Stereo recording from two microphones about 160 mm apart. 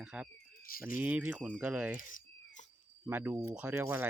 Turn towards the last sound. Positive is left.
turn(degrees=-15)  # may be behind; listen again after turning